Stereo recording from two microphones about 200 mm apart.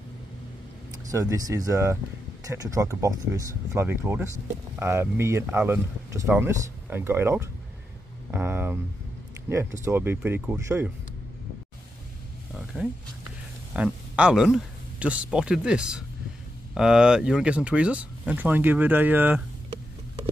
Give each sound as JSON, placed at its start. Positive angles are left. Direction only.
{"t": 1.1, "sound": "speech", "side_deg": -15}
{"t": 13.7, "sound": "speech", "side_deg": -5}